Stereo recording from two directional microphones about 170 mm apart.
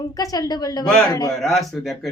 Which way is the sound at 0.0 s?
20° left (ahead or behind).